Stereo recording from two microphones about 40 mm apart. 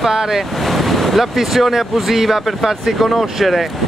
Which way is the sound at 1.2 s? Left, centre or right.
Centre.